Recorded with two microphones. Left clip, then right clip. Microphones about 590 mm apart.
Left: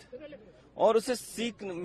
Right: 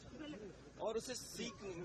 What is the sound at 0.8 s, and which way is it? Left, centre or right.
Speech, left.